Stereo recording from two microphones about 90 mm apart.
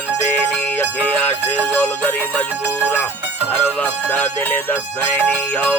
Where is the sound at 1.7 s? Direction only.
20° left (ahead or behind).